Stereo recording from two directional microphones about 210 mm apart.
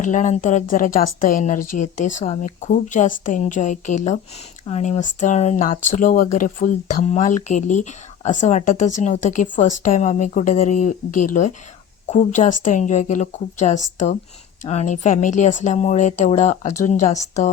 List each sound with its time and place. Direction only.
0.0 s a woman's voice: 35° left (ahead or behind)